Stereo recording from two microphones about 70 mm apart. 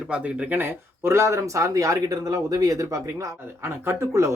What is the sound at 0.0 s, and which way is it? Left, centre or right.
Speech, centre.